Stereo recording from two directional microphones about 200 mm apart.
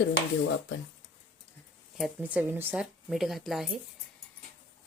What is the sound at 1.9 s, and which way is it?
Speech, 5° right (ahead or behind).